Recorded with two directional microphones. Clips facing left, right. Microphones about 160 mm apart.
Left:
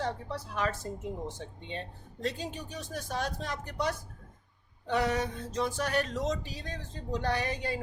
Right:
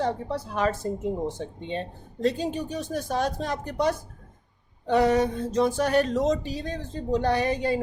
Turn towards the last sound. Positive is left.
turn(degrees=-25)  # may be behind; listen again after turning